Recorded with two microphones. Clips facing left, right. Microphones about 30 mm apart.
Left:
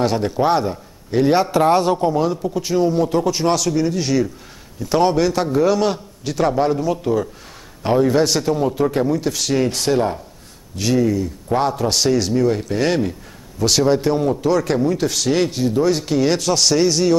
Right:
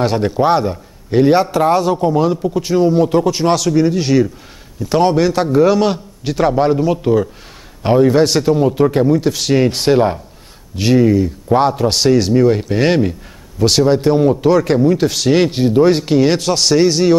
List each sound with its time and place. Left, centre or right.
0.0 s speech: centre
1.5 s a man's voice: centre
2.1 s a man's voice: centre
13.6 s a man's voice: centre